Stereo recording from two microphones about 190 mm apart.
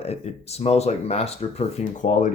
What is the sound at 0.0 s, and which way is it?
Speech, 35° left (ahead or behind).